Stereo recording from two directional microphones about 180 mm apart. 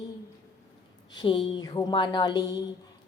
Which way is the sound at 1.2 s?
25° left (ahead or behind).